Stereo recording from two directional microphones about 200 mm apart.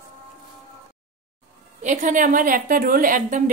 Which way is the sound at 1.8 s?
40° right (ahead or behind).